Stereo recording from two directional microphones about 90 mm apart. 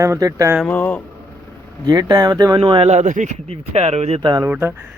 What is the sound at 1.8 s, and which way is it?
Speech, 50° right (ahead or behind).